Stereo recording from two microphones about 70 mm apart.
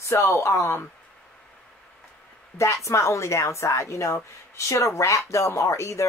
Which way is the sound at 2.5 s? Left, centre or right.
Left.